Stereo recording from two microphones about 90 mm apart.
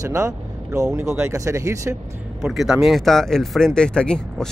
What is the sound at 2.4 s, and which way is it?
Speech, 5° right (ahead or behind).